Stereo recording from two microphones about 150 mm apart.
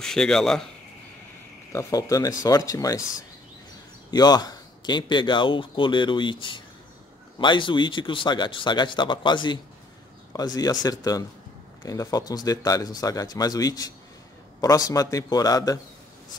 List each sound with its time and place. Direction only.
0.0 s speech: 5° left (ahead or behind)
1.7 s a man's voice: 20° left (ahead or behind)